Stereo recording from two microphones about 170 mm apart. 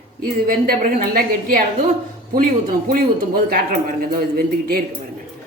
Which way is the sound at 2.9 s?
60° right (ahead or behind).